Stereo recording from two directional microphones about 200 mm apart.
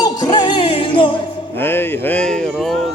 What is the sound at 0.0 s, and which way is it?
Music, 20° left (ahead or behind).